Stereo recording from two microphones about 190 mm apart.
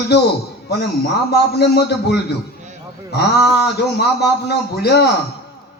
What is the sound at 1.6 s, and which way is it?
Speech, 60° left (ahead or behind).